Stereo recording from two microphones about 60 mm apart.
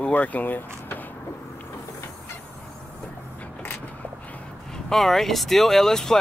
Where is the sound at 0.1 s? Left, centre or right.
Left.